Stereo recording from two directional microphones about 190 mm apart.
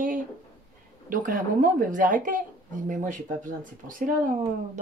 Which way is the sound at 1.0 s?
45° right (ahead or behind).